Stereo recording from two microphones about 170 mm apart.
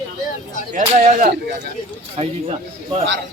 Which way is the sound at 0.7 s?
50° right (ahead or behind).